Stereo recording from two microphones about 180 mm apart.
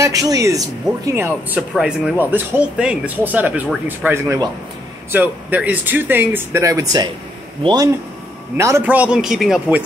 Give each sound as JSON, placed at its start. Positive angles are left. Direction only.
{"t": 0.0, "sound": "speech", "side_deg": -20}